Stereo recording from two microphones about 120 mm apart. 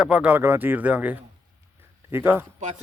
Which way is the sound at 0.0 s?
10° right (ahead or behind).